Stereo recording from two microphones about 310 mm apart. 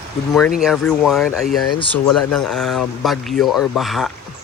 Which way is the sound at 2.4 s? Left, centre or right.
Centre.